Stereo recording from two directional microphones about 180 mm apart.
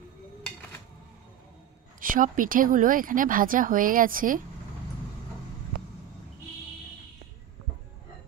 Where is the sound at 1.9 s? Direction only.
50° right (ahead or behind).